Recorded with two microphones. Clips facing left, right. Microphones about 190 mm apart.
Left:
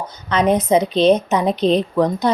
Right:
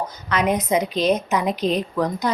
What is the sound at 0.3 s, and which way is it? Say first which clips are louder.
A woman's voice: left 5 dB; 30° left (ahead or behind).